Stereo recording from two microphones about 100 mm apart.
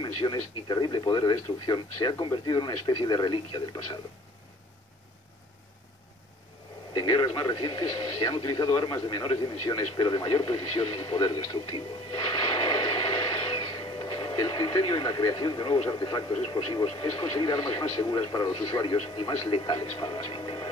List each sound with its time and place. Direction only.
0.0 s speech: 50° left (ahead or behind)
6.9 s speech: 50° left (ahead or behind); by 11.1 s 70° left (ahead or behind)
11.1 s speech: 55° left (ahead or behind)